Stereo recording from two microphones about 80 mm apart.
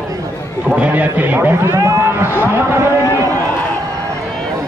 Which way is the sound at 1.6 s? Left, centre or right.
Right.